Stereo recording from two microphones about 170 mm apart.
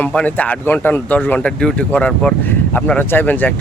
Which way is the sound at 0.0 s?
5° left (ahead or behind).